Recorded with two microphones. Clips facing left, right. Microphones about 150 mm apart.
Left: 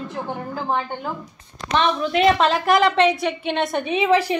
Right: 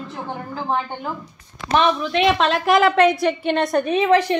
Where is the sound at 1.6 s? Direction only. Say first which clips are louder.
Right 3 dB; 40° left (ahead or behind).